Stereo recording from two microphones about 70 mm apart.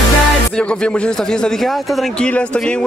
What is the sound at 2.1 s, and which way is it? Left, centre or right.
Speech, centre.